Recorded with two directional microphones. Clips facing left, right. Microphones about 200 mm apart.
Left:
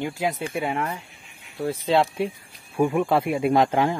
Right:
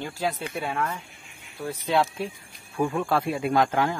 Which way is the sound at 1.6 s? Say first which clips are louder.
Left 3 dB; 30° left (ahead or behind).